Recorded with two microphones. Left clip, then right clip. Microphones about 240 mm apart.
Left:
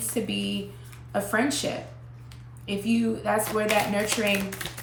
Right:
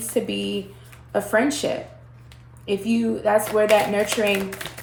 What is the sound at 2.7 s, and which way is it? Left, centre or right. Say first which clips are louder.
Speech: right 4 dB; centre.